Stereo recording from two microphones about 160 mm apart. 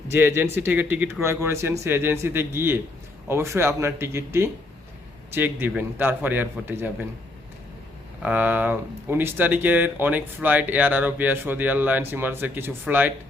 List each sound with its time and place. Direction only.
0.1 s speech: 15° right (ahead or behind)
8.2 s speech: 10° right (ahead or behind)